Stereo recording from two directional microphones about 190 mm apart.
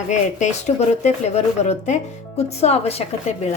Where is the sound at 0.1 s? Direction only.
40° left (ahead or behind).